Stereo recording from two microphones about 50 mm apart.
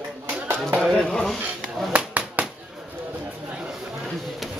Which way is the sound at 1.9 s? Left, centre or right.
Right.